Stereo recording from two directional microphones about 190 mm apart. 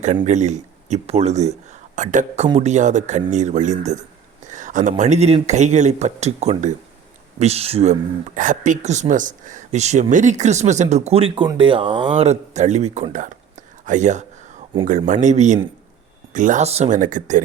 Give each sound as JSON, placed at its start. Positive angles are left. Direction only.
{"t": 0.3, "sound": "speech", "side_deg": -40}